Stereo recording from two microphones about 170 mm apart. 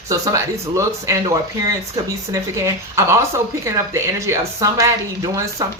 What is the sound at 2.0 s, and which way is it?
A woman's voice, 20° right (ahead or behind).